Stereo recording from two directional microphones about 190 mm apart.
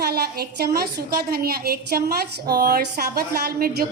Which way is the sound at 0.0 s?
55° right (ahead or behind).